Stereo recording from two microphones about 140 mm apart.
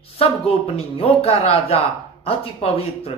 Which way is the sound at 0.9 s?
45° left (ahead or behind).